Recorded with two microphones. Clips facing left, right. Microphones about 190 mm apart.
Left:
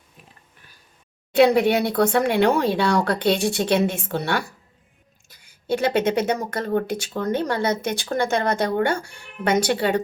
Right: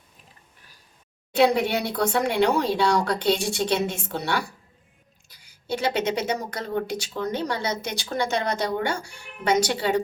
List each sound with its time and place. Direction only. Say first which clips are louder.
1.4 s speech: left 4 dB; 60° left (ahead or behind)